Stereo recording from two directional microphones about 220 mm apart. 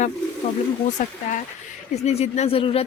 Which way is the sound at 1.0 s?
35° left (ahead or behind).